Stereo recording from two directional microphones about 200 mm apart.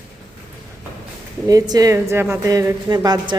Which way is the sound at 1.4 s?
20° right (ahead or behind).